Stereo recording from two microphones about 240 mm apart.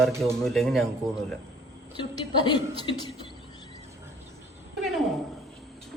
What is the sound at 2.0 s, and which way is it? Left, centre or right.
Speech, centre.